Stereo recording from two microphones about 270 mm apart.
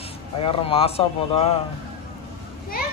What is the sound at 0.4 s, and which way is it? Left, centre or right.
Speech, left.